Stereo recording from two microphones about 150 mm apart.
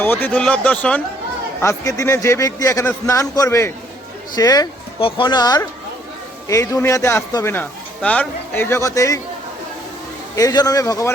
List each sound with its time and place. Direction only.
0.0 s a man's voice: 15° left (ahead or behind)
1.6 s a man's voice: 20° left (ahead or behind)
4.9 s a man's voice: 35° left (ahead or behind); by 9.2 s 20° left (ahead or behind)
10.3 s a man's voice: 25° left (ahead or behind)